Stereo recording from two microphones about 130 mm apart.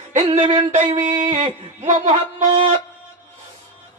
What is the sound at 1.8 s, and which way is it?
Music, 70° right (ahead or behind).